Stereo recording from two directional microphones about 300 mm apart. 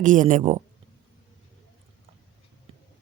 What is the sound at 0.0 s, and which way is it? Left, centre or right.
Speech, right.